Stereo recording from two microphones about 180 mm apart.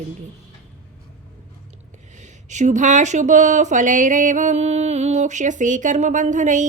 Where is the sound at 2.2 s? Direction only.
40° right (ahead or behind).